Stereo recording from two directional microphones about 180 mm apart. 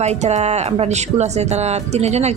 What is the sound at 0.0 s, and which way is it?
Speech, 40° right (ahead or behind).